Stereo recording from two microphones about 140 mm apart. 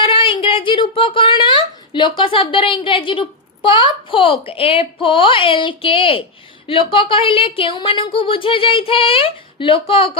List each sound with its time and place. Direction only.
0.0 s speech: 35° left (ahead or behind)